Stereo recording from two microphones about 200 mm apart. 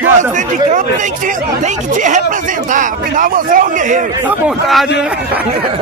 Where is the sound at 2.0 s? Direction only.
40° right (ahead or behind).